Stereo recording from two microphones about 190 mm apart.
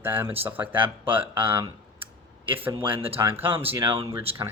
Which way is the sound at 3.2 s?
10° right (ahead or behind).